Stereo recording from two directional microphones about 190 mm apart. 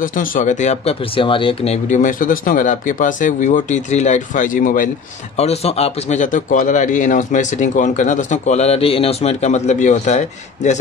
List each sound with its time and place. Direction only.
0.0 s speech: 45° left (ahead or behind)
5.4 s speech: 35° left (ahead or behind)